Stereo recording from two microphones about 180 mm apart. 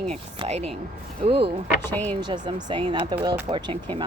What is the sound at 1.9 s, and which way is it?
Speech, 10° left (ahead or behind).